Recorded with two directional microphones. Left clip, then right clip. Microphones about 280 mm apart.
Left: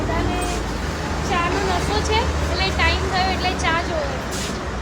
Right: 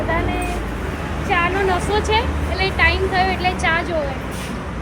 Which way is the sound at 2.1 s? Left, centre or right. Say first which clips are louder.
Right 1 dB; right.